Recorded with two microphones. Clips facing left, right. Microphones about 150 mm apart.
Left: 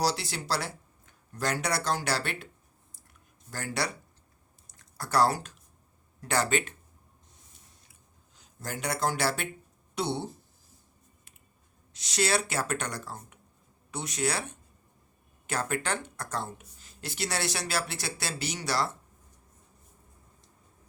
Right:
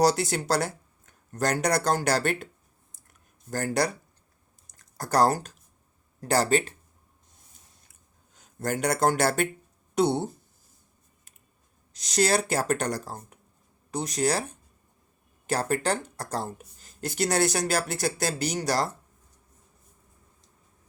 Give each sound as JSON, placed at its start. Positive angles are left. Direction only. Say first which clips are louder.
{"t": 0.0, "sound": "speech", "louder": "right 7 dB", "side_deg": -50}
{"t": 3.1, "sound": "a sound", "louder": "right 10 dB", "side_deg": -45}
{"t": 4.8, "sound": "speech", "louder": "right 3 dB", "side_deg": -40}
{"t": 8.4, "sound": "speech", "louder": "right 9 dB", "side_deg": -50}
{"t": 11.9, "sound": "speech", "louder": "right 4 dB", "side_deg": -40}